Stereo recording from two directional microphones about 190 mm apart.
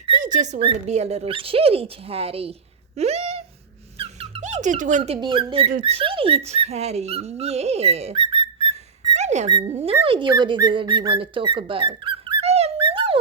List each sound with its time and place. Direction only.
0.2 s speech: 40° right (ahead or behind)
3.0 s a sound: 35° right (ahead or behind)
3.9 s squeak: 30° right (ahead or behind)
5.1 s speech: 25° right (ahead or behind)
9.1 s a sound: 35° right (ahead or behind)
9.5 s speech: 20° right (ahead or behind)